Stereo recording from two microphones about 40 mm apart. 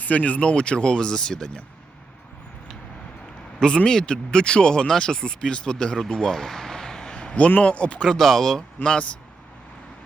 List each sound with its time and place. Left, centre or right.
0.0 s speech: left; by 1.5 s centre
3.6 s speech: left
6.0 s a sound: centre
7.3 s speech: left
8.0 s speech: centre
8.8 s speech: left